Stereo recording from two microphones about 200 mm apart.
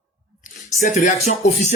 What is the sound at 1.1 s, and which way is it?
Speech, 35° left (ahead or behind).